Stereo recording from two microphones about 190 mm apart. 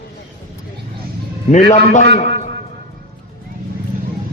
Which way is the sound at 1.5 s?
40° left (ahead or behind).